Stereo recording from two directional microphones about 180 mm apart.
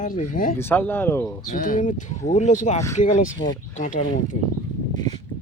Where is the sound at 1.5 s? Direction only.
50° left (ahead or behind).